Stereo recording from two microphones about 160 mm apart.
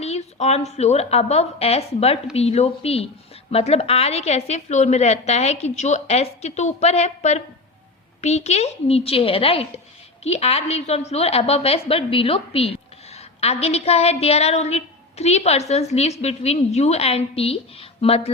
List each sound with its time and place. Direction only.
0.0 s a woman's voice: 45° left (ahead or behind)